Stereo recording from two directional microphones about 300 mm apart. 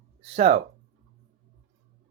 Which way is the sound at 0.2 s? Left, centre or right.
Centre.